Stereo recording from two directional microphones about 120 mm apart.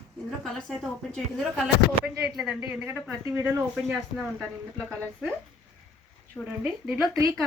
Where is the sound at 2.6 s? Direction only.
20° right (ahead or behind).